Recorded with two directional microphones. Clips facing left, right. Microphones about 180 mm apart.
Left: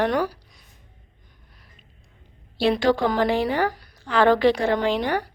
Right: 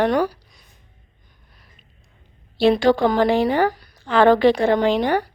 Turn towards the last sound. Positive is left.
turn(degrees=-25)  # may be behind; listen again after turning